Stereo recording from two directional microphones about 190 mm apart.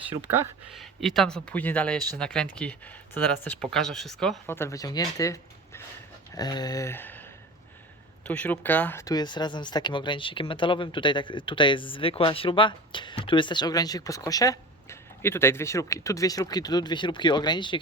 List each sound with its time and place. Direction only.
0.7 s speech: centre (ahead or behind)
4.4 s speech: 10° left (ahead or behind)
8.3 s speech: 10° left (ahead or behind); by 17.7 s 25° left (ahead or behind)